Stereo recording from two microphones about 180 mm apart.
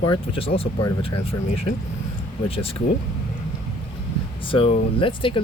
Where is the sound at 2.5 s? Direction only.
30° left (ahead or behind).